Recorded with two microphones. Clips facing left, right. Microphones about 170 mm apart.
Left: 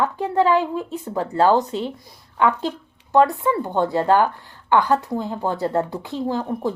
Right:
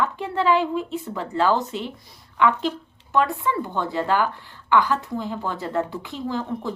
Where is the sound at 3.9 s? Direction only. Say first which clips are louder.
Left 4 dB; 40° left (ahead or behind).